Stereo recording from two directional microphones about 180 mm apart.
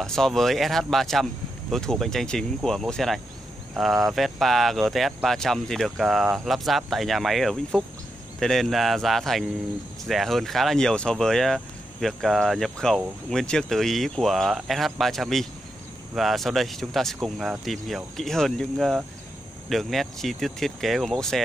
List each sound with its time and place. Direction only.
0.0 s speech: centre (ahead or behind)